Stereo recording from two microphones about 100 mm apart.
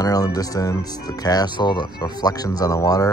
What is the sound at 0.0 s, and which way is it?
Speech, 40° left (ahead or behind).